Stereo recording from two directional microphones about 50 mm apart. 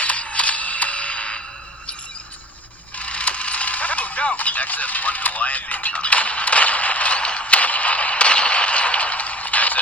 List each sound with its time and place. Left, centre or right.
0.0 s music: left
3.0 s coin: left